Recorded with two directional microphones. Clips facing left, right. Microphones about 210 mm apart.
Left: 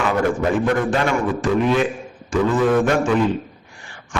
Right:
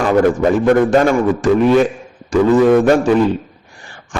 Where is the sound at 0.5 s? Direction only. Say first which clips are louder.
Right 7 dB; 40° right (ahead or behind).